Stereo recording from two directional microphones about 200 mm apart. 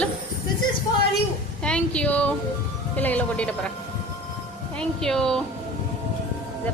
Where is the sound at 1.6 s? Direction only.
5° left (ahead or behind).